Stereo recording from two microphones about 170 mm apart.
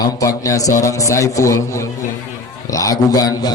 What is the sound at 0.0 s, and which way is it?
A man's voice, 20° left (ahead or behind).